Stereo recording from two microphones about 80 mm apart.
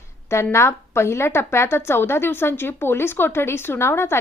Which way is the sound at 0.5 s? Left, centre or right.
Left.